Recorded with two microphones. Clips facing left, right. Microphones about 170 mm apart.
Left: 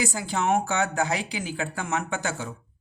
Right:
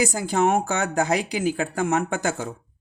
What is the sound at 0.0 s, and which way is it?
Speech, 45° right (ahead or behind).